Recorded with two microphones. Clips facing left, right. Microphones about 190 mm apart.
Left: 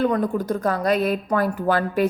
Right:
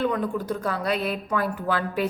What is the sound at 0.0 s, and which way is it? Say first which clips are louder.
A woman's voice: left 4 dB; 40° left (ahead or behind).